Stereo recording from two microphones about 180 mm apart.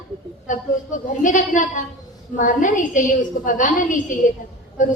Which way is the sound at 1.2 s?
45° left (ahead or behind).